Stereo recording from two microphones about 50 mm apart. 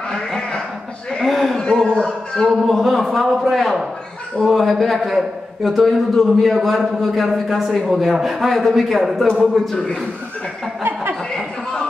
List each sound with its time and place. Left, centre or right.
0.1 s a man's voice: centre
2.5 s a man's voice: centre
10.8 s chuckle: right